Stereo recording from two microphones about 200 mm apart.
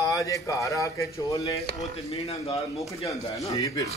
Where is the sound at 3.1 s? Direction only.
15° left (ahead or behind).